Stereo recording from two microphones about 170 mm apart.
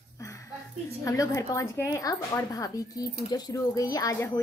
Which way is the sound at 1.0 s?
20° left (ahead or behind).